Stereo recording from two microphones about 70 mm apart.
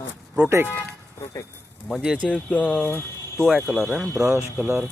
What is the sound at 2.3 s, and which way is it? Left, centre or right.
Speech, centre.